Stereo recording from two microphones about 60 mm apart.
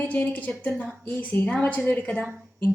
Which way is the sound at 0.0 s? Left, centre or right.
Left.